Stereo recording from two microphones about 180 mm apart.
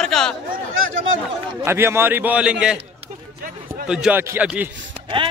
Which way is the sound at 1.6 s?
15° right (ahead or behind).